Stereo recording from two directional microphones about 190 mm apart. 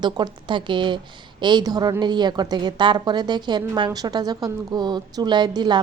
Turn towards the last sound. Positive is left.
turn(degrees=-25)  # may be behind; listen again after turning